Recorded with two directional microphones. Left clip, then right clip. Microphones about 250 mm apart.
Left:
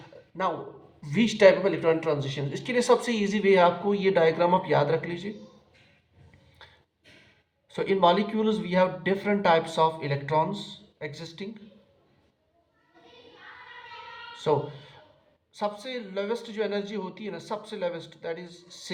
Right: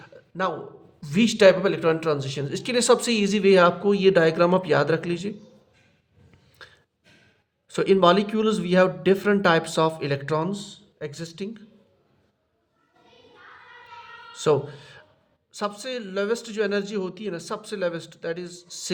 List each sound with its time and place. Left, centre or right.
1.0 s speech: right
7.7 s speech: right
14.3 s speech: right